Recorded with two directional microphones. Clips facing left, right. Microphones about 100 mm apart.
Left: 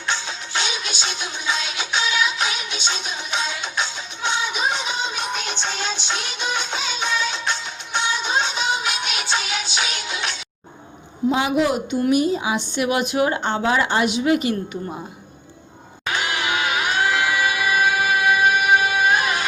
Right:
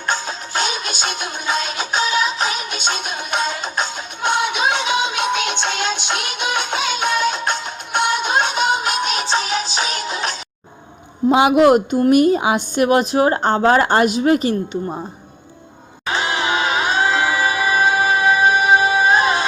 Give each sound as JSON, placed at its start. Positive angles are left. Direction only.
{"t": 0.0, "sound": "music", "side_deg": -45}
{"t": 11.3, "sound": "a woman's voice", "side_deg": -65}
{"t": 16.0, "sound": "music", "side_deg": -25}